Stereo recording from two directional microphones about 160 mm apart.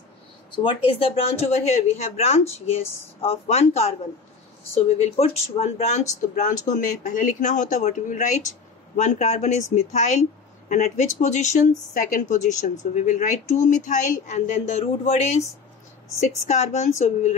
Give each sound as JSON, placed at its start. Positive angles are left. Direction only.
{"t": 0.7, "sound": "speech", "side_deg": 35}